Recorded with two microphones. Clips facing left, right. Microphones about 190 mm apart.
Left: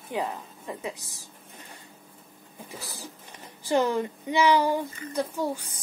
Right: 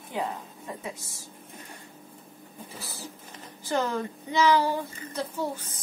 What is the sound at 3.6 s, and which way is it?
A woman's voice, 15° left (ahead or behind).